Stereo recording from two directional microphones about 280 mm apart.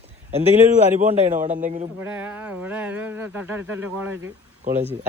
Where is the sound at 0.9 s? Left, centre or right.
Right.